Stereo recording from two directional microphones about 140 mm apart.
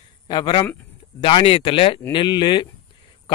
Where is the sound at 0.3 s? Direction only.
30° left (ahead or behind).